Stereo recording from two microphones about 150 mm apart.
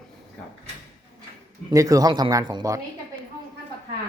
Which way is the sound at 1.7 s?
20° right (ahead or behind).